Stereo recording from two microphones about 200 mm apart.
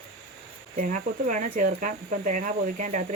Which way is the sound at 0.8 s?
40° right (ahead or behind).